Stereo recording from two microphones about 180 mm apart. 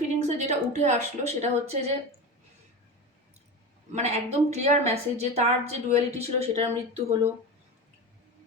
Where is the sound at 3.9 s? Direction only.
40° right (ahead or behind).